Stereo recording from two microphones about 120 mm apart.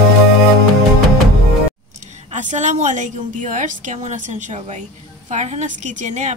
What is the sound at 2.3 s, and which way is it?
A woman's voice, 80° right.